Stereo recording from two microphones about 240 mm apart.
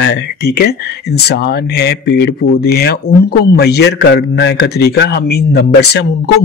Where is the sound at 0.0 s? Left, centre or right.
Left.